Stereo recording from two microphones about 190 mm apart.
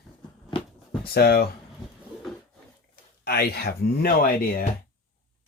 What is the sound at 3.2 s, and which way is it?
Speech, 55° left (ahead or behind).